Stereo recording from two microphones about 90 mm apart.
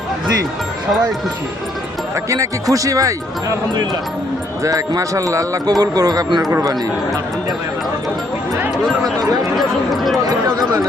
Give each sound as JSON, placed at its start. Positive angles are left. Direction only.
{"t": 2.3, "sound": "speech", "side_deg": -40}
{"t": 4.6, "sound": "speech", "side_deg": -40}
{"t": 9.6, "sound": "a sound", "side_deg": 0}